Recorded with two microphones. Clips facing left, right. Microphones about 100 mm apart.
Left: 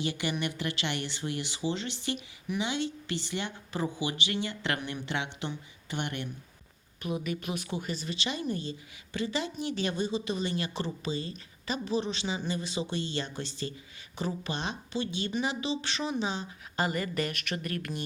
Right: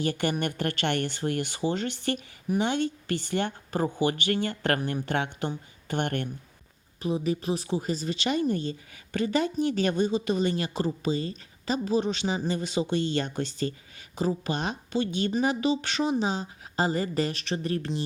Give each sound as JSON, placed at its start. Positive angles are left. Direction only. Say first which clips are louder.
{"t": 0.0, "sound": "speech", "louder": "right 4 dB", "side_deg": -50}
{"t": 7.0, "sound": "speech", "louder": "right 6 dB", "side_deg": -30}